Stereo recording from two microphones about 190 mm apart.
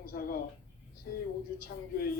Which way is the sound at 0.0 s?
50° left (ahead or behind).